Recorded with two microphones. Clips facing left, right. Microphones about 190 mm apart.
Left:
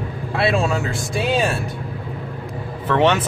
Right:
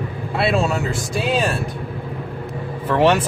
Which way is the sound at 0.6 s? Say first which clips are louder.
Right 1 dB; centre (ahead or behind).